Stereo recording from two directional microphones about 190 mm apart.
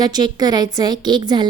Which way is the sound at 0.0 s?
20° right (ahead or behind).